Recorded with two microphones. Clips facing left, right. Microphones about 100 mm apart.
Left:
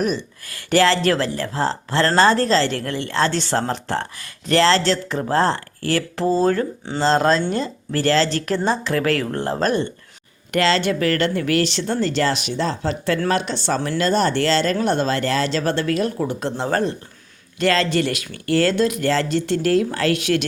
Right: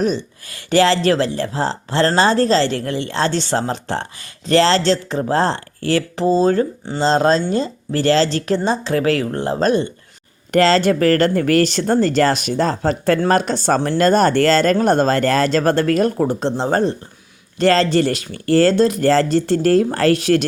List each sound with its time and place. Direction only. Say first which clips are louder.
0.0 s speech: right 3 dB; 25° right (ahead or behind)
10.5 s speech: right 5 dB; 40° right (ahead or behind)
16.4 s speech: right 1 dB; 25° right (ahead or behind)